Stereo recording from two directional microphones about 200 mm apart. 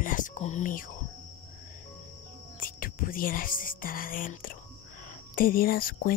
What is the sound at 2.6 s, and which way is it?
Speech, 45° left (ahead or behind).